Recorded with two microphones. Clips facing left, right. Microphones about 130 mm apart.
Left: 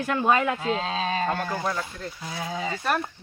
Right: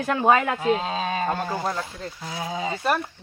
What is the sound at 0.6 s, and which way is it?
Speech, 15° right (ahead or behind).